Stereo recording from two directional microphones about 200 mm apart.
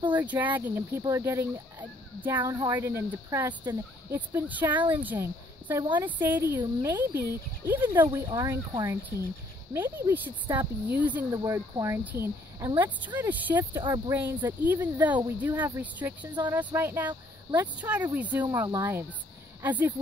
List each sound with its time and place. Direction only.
0.2 s speech: 10° right (ahead or behind)
2.4 s speech: 20° right (ahead or behind)
13.8 s speech: 20° right (ahead or behind)
14.1 s speech: 10° right (ahead or behind)